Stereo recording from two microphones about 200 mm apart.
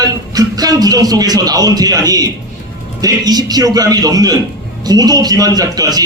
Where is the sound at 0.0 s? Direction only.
20° right (ahead or behind).